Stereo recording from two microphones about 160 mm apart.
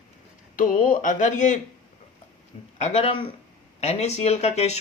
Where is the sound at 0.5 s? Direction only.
55° left (ahead or behind).